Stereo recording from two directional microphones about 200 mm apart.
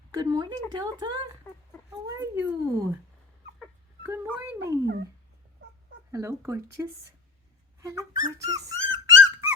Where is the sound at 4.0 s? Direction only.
10° right (ahead or behind).